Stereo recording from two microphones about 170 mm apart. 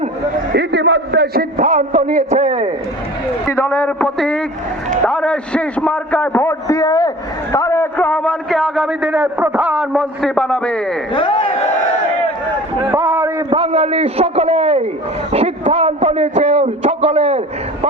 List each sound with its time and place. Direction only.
0.5 s a man's voice: 85° right
1.5 s a man's voice: 45° right (ahead or behind)
3.4 s a man's voice: 15° left (ahead or behind)
11.1 s speech: 30° left (ahead or behind)
12.9 s a sound: 15° right (ahead or behind)
13.5 s a sound: 35° right (ahead or behind)
15.3 s a man's voice: 40° right (ahead or behind)